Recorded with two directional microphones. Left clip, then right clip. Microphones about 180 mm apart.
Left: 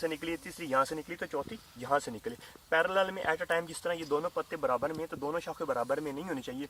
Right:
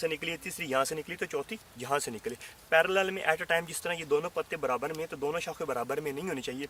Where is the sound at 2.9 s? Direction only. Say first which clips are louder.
Right 2 dB; 35° right (ahead or behind).